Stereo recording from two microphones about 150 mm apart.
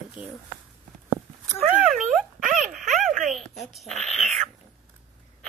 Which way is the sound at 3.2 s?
Centre (ahead or behind).